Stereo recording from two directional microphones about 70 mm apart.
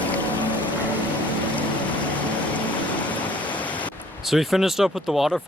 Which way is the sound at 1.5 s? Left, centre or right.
Left.